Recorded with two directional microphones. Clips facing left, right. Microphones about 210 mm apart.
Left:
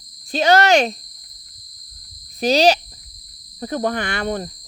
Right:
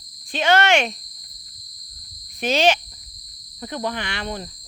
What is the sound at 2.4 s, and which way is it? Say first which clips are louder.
Speech: left 4 dB; 35° left (ahead or behind).